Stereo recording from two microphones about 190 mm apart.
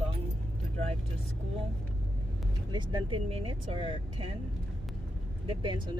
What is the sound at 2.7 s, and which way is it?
Speech, 25° right (ahead or behind).